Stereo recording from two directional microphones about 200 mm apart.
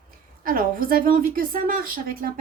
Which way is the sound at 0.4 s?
45° right (ahead or behind).